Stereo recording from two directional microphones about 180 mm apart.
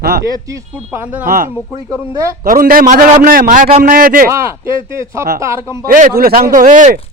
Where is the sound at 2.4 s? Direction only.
50° right (ahead or behind).